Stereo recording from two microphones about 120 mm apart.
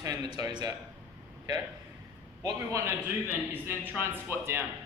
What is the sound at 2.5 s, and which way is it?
A man's voice, 25° right (ahead or behind).